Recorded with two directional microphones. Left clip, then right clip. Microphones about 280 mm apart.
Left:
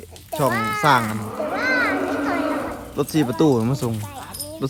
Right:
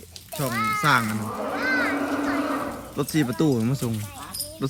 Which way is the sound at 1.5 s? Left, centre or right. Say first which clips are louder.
Left 4 dB; left.